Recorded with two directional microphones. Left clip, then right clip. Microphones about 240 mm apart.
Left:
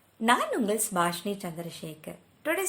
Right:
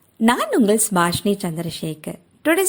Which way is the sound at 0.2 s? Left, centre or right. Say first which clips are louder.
Right 7 dB; right.